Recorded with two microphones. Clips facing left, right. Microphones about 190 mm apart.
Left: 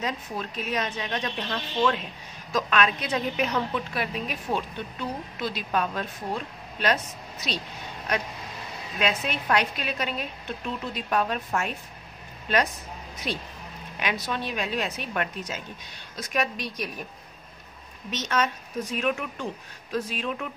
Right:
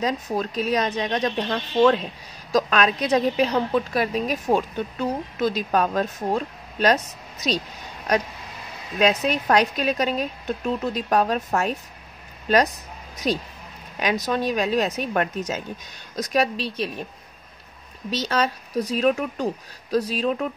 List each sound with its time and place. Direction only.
0.0 s a woman's voice: 40° right (ahead or behind)
18.1 s a woman's voice: 35° right (ahead or behind)